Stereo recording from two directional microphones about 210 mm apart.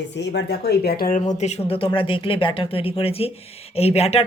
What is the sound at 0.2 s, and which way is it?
Speech, 55° left (ahead or behind).